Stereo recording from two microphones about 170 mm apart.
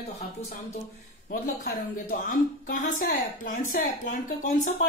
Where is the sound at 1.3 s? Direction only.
50° left (ahead or behind).